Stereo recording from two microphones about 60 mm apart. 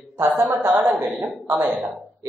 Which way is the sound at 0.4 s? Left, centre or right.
Right.